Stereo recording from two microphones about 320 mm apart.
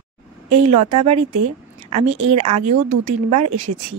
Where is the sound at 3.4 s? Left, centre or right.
Right.